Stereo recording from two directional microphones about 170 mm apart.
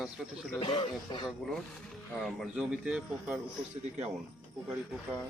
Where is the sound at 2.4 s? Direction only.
5° right (ahead or behind).